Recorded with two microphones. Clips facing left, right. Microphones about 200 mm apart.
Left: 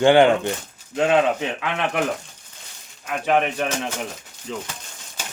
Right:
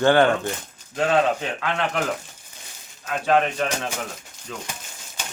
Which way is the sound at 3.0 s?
15° left (ahead or behind).